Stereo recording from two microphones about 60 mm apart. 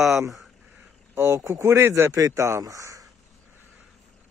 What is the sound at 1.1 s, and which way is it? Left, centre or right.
Speech, right.